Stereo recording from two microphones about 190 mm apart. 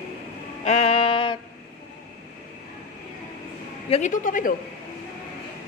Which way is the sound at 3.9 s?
40° left (ahead or behind).